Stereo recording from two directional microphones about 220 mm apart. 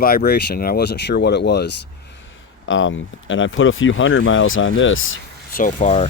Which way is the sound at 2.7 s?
60° left (ahead or behind).